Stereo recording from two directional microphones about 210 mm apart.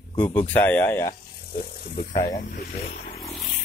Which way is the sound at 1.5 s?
45° left (ahead or behind).